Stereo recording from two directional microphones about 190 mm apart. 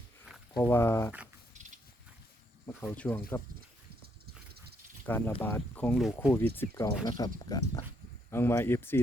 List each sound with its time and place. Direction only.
0.6 s speech: 10° left (ahead or behind)
2.8 s speech: 10° left (ahead or behind)
5.0 s speech: 10° left (ahead or behind)